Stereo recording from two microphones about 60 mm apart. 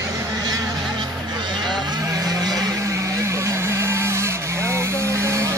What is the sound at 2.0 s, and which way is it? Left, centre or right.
Vehicle, right.